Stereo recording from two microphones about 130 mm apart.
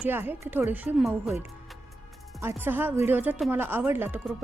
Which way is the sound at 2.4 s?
15° right (ahead or behind).